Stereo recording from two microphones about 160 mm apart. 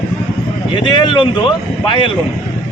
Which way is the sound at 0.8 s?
30° left (ahead or behind).